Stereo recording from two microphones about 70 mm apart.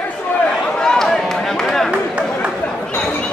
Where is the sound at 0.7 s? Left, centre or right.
Centre.